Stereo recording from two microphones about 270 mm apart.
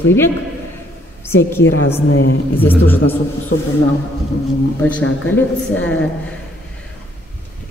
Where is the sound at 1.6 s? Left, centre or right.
Left.